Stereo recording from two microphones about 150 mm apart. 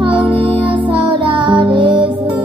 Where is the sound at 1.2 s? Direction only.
30° right (ahead or behind).